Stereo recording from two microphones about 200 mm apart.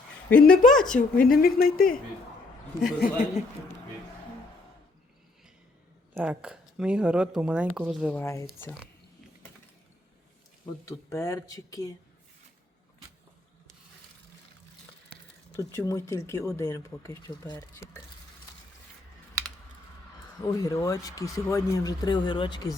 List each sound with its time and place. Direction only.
0.3 s speech: 45° left (ahead or behind)
0.7 s speech: 5° left (ahead or behind)
1.2 s speech: 45° left (ahead or behind)
3.0 s speech: 40° left (ahead or behind)
6.1 s speech: 5° right (ahead or behind)
8.0 s speech: 10° left (ahead or behind)
10.8 s speech: 15° left (ahead or behind)
15.5 s speech: 15° left (ahead or behind)
20.4 s speech: 20° left (ahead or behind)